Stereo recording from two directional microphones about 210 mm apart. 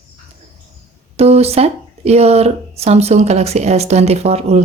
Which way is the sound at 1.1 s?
30° right (ahead or behind).